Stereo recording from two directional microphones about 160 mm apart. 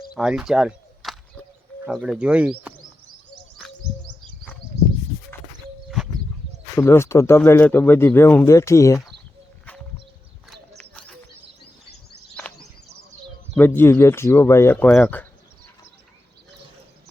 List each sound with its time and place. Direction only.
0.1 s a sound: 5° right (ahead or behind)
2.0 s speech: 5° right (ahead or behind)
6.7 s speech: 15° left (ahead or behind)
10.5 s clip-clop: 5° left (ahead or behind)
13.6 s speech: 15° left (ahead or behind)